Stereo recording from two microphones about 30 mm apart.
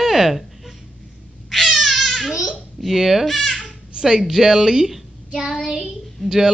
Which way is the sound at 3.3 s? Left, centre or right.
Centre.